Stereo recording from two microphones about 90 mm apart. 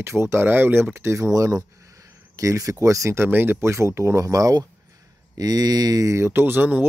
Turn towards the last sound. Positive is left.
turn(degrees=-20)  # may be behind; listen again after turning